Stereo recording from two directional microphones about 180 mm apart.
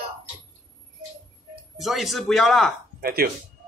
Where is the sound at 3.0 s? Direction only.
55° right (ahead or behind).